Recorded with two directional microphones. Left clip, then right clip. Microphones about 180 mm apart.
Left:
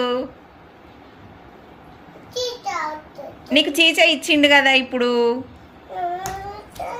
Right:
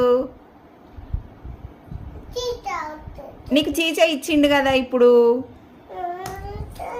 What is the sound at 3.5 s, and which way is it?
A woman's voice, 40° right (ahead or behind).